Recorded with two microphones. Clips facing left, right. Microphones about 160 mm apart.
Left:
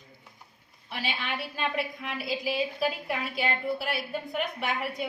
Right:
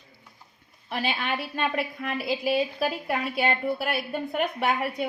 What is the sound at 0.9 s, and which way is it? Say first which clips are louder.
A woman's voice: right 5 dB; 55° right (ahead or behind).